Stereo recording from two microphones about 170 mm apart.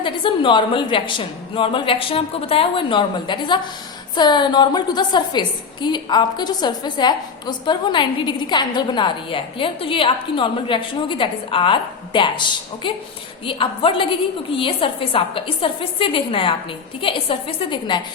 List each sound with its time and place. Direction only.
0.0 s a woman's voice: 30° left (ahead or behind)